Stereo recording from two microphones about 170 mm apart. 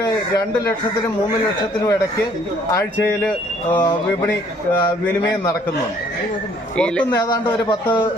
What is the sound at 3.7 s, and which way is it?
Speech, 25° left (ahead or behind).